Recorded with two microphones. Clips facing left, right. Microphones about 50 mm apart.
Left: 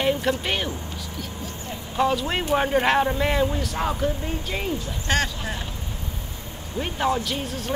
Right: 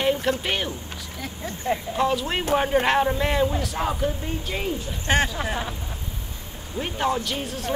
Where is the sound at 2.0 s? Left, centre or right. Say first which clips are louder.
Left 4 dB; centre.